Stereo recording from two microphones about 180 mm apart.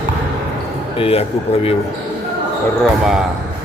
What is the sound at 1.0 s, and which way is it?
Speech, 35° left (ahead or behind).